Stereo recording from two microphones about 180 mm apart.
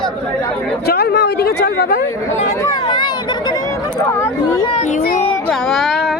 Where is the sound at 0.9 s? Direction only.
60° left (ahead or behind).